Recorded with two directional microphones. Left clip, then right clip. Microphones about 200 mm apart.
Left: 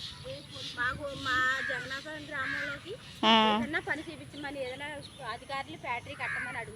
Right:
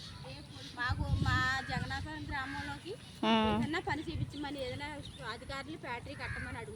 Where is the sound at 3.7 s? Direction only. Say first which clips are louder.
Left 3 dB; 70° right (ahead or behind).